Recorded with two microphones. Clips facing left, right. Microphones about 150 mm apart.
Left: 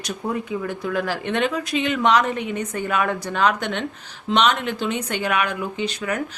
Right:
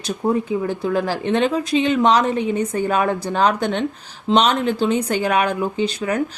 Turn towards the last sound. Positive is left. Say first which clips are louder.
# right 4 dB
turn(degrees=-35)  # may be behind; listen again after turning